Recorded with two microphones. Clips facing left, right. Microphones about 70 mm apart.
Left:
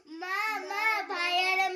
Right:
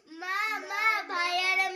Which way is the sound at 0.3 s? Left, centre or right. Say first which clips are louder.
Right 1 dB; right.